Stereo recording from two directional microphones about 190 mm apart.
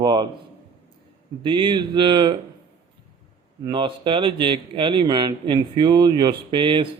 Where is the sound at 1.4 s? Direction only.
25° right (ahead or behind).